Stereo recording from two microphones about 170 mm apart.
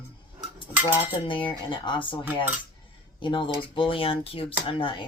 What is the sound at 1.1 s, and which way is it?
Speech, 30° left (ahead or behind).